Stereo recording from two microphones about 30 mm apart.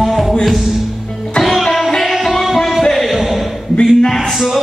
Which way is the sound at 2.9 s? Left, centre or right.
Centre.